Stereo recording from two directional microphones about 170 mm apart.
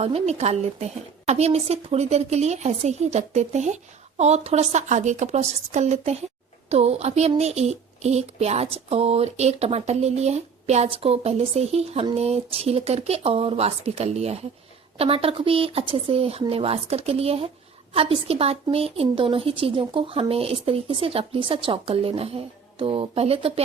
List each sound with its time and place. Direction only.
0.0 s a woman's voice: 40° right (ahead or behind)